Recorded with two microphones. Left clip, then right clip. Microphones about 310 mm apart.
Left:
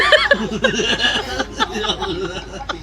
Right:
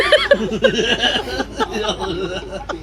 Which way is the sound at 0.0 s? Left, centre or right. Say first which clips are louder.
Even; centre.